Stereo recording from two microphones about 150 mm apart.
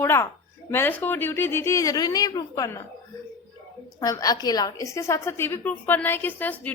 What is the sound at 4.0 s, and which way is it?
A woman's voice, 25° left (ahead or behind).